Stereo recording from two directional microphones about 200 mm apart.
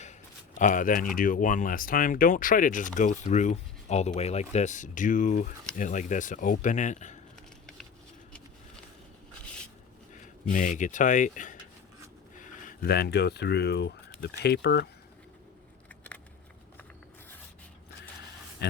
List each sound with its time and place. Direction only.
0.6 s speech: 40° left (ahead or behind)
10.5 s speech: 40° left (ahead or behind); by 14.8 s 55° left (ahead or behind)
18.6 s speech: 55° left (ahead or behind)